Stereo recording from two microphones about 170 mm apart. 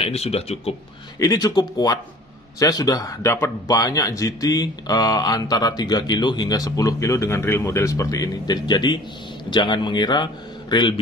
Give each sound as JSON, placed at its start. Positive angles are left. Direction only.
{"t": 0.0, "sound": "speech", "side_deg": 35}
{"t": 1.2, "sound": "speech", "side_deg": 20}